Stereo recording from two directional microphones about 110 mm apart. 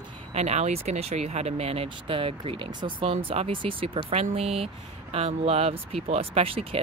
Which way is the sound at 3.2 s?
60° right (ahead or behind).